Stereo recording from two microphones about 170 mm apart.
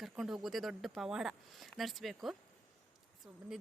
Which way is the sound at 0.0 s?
Centre (ahead or behind).